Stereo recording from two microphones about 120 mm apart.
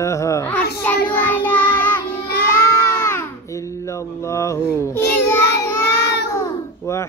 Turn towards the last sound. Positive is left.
turn(degrees=25)  # may be behind; listen again after turning